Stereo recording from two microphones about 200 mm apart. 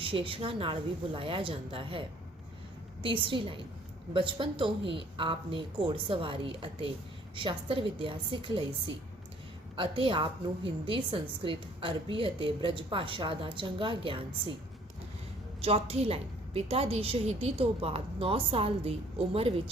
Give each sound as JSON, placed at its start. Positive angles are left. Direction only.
{"t": 0.0, "sound": "a woman's voice", "side_deg": -25}
{"t": 15.6, "sound": "a woman's voice", "side_deg": -30}